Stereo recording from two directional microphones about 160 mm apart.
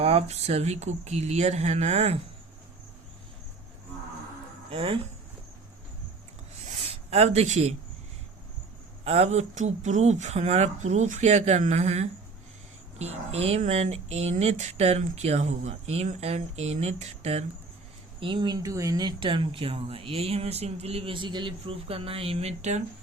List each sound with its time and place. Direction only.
0.0 s speech: 40° right (ahead or behind)
4.7 s speech: 35° right (ahead or behind)
6.7 s a sound: 40° right (ahead or behind)
9.0 s speech: 40° right (ahead or behind)
18.2 s speech: 30° right (ahead or behind)